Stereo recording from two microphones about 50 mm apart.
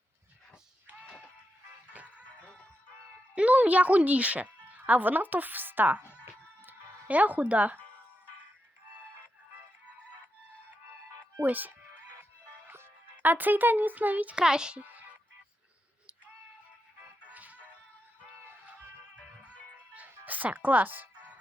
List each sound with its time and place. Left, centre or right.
3.3 s speech: right
6.6 s music: right
11.4 s speech: right
13.2 s speech: right
14.3 s a child's voice: centre
14.8 s music: right
17.3 s music: right
19.9 s music: right